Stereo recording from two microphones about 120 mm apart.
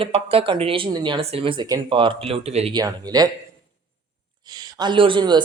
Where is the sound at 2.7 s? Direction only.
30° right (ahead or behind).